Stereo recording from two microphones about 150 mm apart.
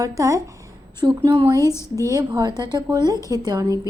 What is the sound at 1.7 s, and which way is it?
Speech, 20° left (ahead or behind).